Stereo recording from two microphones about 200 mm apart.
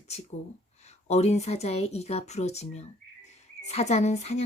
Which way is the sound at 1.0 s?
35° left (ahead or behind).